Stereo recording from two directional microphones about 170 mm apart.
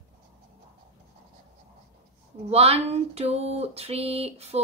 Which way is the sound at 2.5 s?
35° right (ahead or behind).